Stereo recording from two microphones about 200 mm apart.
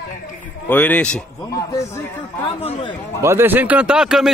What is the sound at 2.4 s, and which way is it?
Speech, 30° left (ahead or behind).